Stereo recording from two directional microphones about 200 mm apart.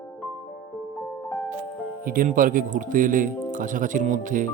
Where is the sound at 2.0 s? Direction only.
45° right (ahead or behind).